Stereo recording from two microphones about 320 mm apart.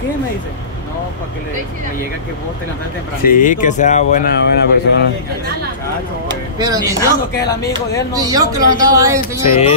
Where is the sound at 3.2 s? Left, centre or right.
Left.